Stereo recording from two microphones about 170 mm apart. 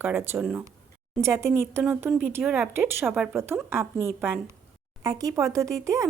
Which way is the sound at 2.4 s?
Centre (ahead or behind).